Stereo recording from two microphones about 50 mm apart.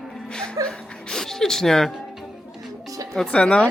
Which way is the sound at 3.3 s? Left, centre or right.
Left.